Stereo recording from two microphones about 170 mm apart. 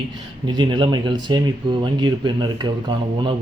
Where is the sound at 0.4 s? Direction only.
25° right (ahead or behind).